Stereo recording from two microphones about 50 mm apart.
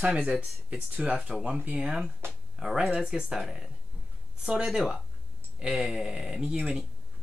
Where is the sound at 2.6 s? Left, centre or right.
Centre.